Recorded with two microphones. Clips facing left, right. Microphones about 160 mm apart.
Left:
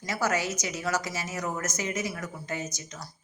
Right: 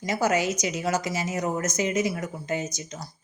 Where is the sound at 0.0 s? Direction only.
15° right (ahead or behind).